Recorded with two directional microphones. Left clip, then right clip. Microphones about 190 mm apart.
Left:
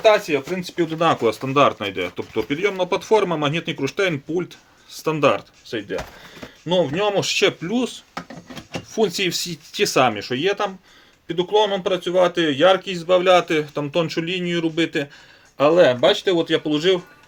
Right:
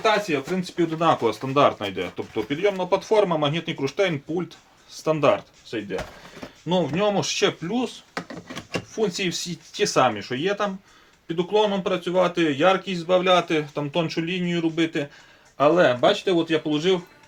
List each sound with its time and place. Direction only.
0.0 s speech: 50° left (ahead or behind)